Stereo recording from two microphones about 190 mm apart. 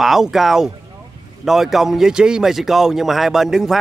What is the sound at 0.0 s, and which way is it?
A man's voice, centre (ahead or behind).